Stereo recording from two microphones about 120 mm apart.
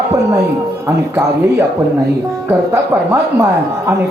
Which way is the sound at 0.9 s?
20° right (ahead or behind).